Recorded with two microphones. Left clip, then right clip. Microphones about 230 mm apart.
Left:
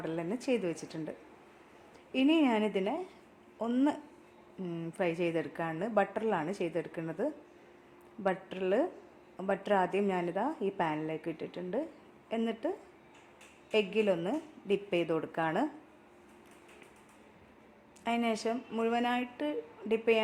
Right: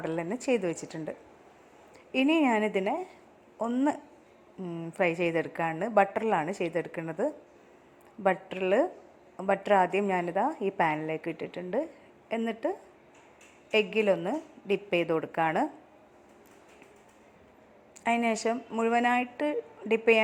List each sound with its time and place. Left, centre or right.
0.0 s a woman's voice: centre
2.1 s a woman's voice: centre
18.0 s a woman's voice: centre